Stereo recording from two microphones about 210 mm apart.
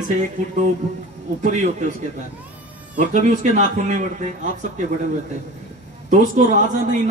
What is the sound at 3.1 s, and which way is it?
Speech, 35° right (ahead or behind).